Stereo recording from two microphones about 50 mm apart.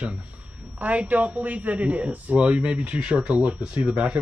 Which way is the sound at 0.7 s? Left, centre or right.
Right.